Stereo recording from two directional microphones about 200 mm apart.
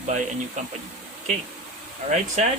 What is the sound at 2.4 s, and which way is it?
Speech, 35° right (ahead or behind).